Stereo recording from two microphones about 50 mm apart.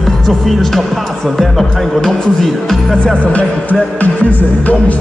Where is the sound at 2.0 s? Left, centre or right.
Centre.